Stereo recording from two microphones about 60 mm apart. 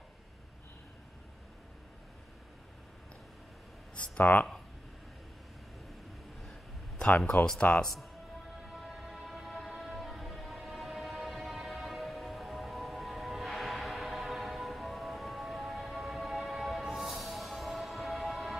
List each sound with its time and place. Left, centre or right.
3.9 s a sound: centre
4.2 s speech: left
7.0 s speech: centre
7.8 s speech: centre
8.6 s music: centre